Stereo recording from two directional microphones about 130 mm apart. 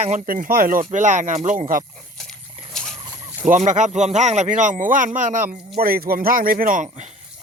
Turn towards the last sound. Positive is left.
turn(degrees=-90)